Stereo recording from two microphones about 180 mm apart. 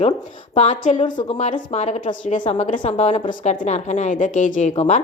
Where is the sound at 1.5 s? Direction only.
35° left (ahead or behind).